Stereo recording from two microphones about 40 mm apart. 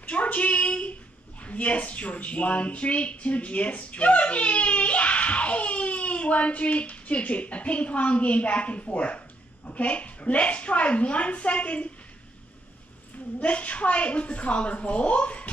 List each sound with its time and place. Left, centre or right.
0.1 s child singing: left
1.4 s speech: left
13.4 s speech: left